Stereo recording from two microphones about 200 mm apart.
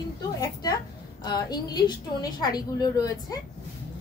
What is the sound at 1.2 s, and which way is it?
A woman's voice, 20° left (ahead or behind).